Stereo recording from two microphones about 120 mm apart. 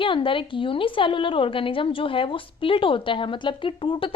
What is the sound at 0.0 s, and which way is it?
A woman's voice, 45° left (ahead or behind).